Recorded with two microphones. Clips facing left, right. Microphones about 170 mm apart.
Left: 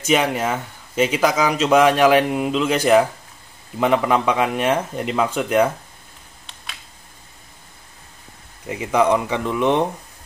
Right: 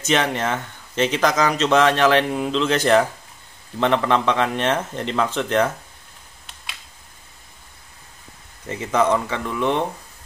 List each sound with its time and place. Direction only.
0.0 s speech: 10° left (ahead or behind)
8.6 s speech: 10° left (ahead or behind)